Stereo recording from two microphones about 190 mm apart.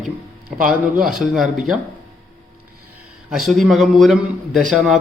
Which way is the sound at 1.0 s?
Centre (ahead or behind).